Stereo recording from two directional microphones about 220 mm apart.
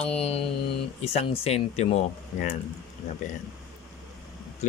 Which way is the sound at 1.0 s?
25° left (ahead or behind).